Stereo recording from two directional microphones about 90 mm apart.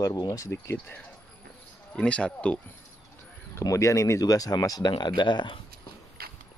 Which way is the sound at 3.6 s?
35° left (ahead or behind).